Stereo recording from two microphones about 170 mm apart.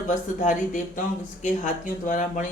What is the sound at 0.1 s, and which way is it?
Speech, 50° left (ahead or behind).